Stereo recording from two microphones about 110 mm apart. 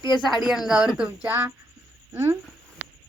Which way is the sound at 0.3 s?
Centre (ahead or behind).